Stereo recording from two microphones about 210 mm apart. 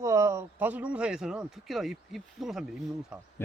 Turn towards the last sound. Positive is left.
turn(degrees=-5)  # may be behind; listen again after turning